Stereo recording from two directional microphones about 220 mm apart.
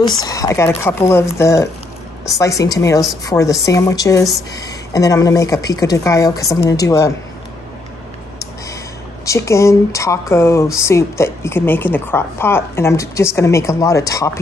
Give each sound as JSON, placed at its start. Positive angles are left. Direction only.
{"t": 0.0, "sound": "speech", "side_deg": 15}
{"t": 9.2, "sound": "speech", "side_deg": 15}